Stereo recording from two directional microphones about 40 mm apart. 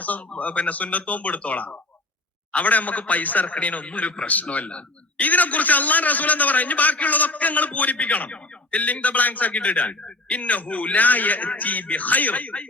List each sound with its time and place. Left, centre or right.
0.3 s a man's voice: left